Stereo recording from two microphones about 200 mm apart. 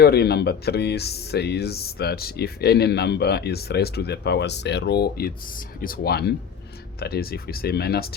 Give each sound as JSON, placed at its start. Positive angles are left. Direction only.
{"t": 0.0, "sound": "speech", "side_deg": 50}